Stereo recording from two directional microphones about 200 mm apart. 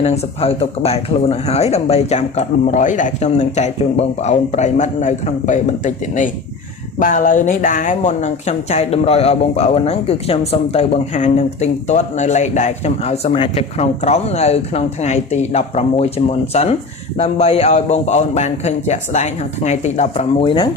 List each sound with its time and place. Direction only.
0.0 s speech: 30° left (ahead or behind)